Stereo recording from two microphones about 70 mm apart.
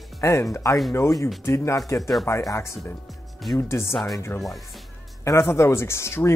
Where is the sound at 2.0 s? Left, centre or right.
Centre.